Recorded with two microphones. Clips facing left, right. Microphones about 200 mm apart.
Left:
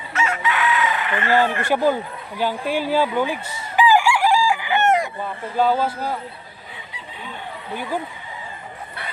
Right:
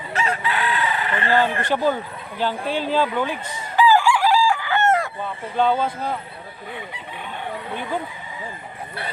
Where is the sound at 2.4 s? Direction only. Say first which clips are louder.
Left 1 dB; 10° left (ahead or behind).